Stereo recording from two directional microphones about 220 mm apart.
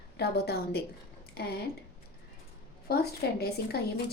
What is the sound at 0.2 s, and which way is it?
Speech, 45° left (ahead or behind).